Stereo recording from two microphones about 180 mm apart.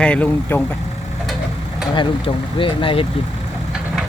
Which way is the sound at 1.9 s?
30° left (ahead or behind).